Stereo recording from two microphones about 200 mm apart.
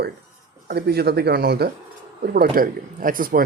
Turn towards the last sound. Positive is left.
turn(degrees=-45)  # may be behind; listen again after turning